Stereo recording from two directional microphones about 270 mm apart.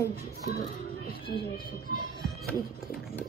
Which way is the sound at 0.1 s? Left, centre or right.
Left.